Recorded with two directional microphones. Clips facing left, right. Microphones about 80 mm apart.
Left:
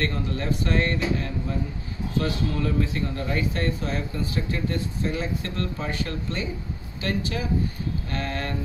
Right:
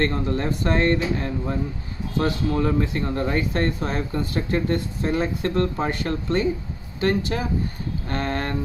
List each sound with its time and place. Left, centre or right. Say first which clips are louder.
0.0 s speech: right 5 dB; right